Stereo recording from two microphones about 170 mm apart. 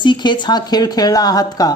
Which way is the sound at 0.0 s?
25° left (ahead or behind).